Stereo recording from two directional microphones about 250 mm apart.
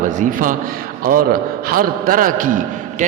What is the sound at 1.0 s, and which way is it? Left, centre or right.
A man's voice, right.